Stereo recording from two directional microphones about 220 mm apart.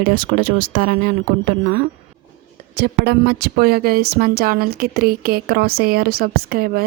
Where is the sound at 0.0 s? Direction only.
40° right (ahead or behind).